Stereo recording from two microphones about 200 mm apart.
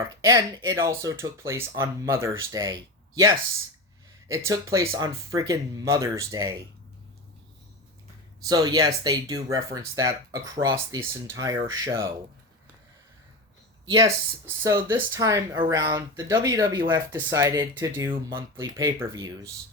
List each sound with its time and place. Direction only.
0.2 s speech: 20° right (ahead or behind)
8.4 s speech: 20° right (ahead or behind)
13.9 s speech: 15° right (ahead or behind)